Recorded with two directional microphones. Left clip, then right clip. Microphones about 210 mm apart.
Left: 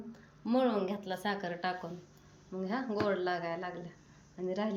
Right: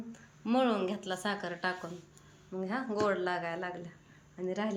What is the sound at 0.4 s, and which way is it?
Speech, 5° left (ahead or behind).